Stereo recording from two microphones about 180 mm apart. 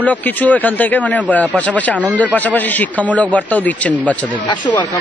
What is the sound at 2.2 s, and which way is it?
Speech, 10° left (ahead or behind).